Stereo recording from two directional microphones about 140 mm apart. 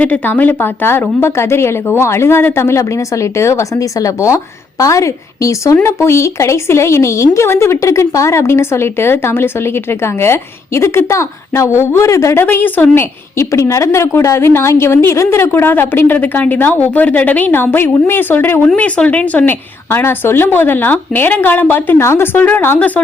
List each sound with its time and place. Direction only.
0.0 s a woman's voice: 10° left (ahead or behind)